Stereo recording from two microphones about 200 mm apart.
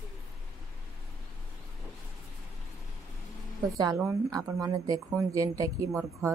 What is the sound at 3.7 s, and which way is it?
A woman's voice, 15° right (ahead or behind).